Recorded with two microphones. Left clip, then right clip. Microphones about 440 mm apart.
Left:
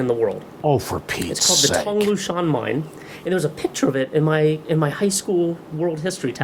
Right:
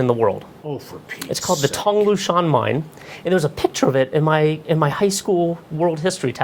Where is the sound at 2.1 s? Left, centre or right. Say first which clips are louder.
Right 4 dB; right.